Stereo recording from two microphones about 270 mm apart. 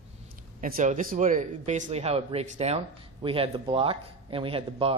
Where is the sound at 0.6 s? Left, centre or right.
Right.